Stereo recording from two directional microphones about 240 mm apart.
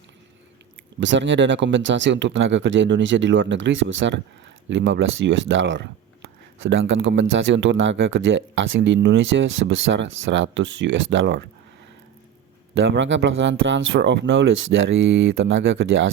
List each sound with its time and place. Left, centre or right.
0.9 s speech: right
12.7 s speech: right